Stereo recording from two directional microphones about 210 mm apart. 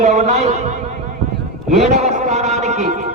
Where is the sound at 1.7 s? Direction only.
35° right (ahead or behind).